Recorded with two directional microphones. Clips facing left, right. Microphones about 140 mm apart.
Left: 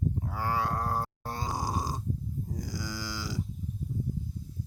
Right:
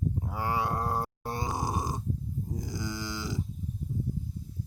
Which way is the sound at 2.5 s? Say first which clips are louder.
Right 2 dB; 25° right (ahead or behind).